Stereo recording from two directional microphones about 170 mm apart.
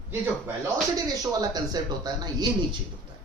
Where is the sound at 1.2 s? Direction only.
20° right (ahead or behind).